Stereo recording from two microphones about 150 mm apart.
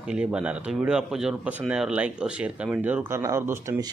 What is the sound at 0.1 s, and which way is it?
Speech, 5° right (ahead or behind).